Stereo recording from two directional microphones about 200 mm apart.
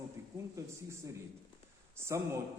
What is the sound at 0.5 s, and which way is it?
A man's voice, 15° right (ahead or behind).